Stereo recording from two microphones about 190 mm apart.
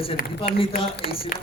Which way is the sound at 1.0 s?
50° left (ahead or behind).